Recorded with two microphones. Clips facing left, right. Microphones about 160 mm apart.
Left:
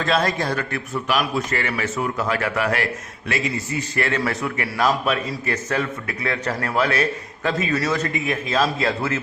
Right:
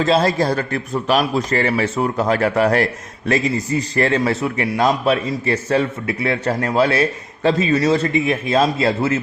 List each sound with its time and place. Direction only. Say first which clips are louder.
0.0 s a man's voice: right 5 dB; 25° right (ahead or behind)